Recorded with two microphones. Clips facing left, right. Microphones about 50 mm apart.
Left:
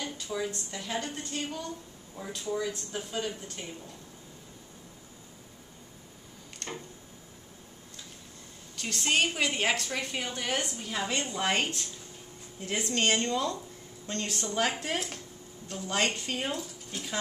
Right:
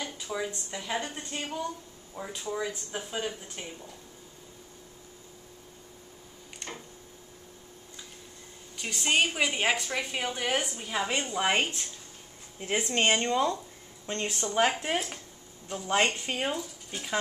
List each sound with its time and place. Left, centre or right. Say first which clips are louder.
0.0 s a woman's voice: even; centre
6.6 s a sound: left 2 dB; centre
8.7 s a woman's voice: right 1 dB; centre